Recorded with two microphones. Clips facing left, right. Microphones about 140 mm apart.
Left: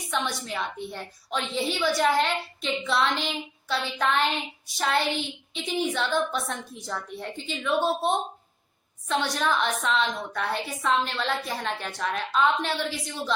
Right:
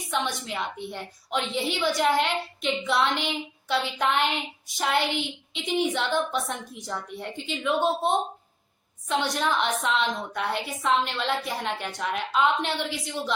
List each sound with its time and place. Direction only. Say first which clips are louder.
0.1 s a woman's voice: right 1 dB; 20° right (ahead or behind)